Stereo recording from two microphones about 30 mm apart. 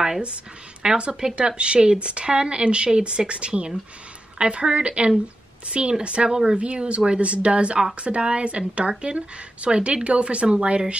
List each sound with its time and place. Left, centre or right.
0.8 s speech: right
6.2 s speech: right
6.6 s speech: right